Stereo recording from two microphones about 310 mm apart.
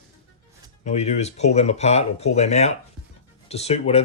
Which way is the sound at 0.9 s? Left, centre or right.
Left.